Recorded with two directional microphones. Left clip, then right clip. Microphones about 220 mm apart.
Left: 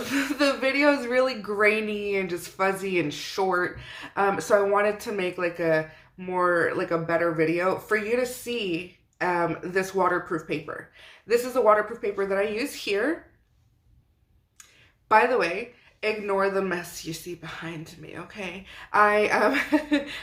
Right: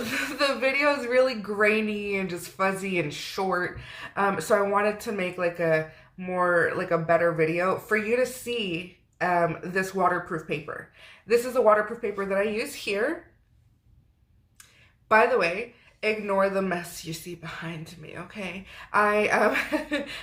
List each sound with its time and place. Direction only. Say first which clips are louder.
0.1 s speech: left 2 dB; 5° left (ahead or behind)
15.0 s speech: even; 10° left (ahead or behind)